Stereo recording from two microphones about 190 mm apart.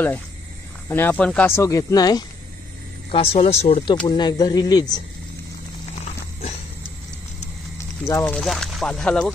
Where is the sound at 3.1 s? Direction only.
30° left (ahead or behind).